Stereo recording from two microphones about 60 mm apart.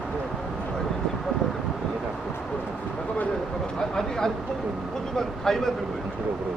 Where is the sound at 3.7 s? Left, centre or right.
Centre.